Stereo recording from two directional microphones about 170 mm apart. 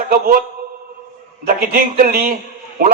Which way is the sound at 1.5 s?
60° right (ahead or behind).